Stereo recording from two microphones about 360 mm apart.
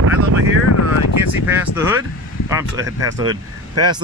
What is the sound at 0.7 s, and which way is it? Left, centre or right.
Speech, left.